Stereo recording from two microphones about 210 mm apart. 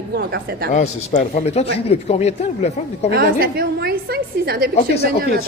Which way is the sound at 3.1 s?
45° right (ahead or behind).